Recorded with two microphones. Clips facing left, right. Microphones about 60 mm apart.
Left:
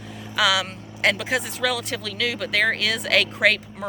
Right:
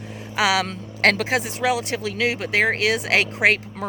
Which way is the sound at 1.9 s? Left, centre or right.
Right.